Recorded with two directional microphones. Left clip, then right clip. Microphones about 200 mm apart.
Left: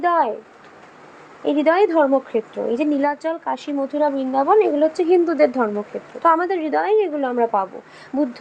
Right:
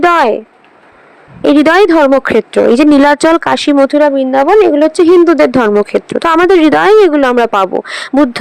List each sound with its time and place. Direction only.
0.0 s speech: 55° right (ahead or behind)
1.4 s speech: 55° right (ahead or behind)